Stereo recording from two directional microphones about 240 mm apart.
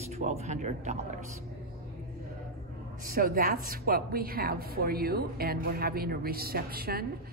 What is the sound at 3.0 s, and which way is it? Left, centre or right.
Speech, right.